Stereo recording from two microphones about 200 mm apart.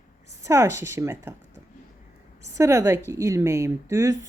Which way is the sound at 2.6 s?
15° right (ahead or behind).